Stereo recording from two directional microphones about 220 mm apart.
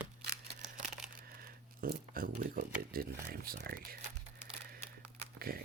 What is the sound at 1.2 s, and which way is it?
Speech, 45° right (ahead or behind).